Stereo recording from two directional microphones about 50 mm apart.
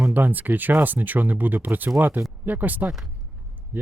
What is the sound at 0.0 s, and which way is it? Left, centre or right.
Speech, right.